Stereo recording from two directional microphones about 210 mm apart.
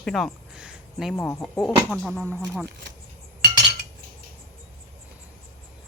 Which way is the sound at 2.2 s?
10° right (ahead or behind).